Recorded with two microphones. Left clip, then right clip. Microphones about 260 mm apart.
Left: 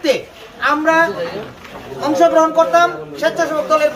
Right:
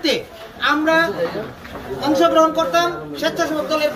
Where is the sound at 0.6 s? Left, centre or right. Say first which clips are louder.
Left 2 dB; centre.